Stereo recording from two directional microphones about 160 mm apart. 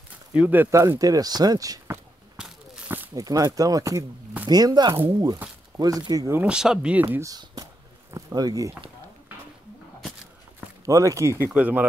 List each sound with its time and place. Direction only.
0.3 s speech: 10° right (ahead or behind)
2.3 s a sound: 10° right (ahead or behind)
3.2 s speech: 20° right (ahead or behind)
4.9 s speech: 15° right (ahead or behind)
6.4 s speech: 5° right (ahead or behind); by 8.9 s 20° right (ahead or behind)
10.9 s speech: 20° right (ahead or behind)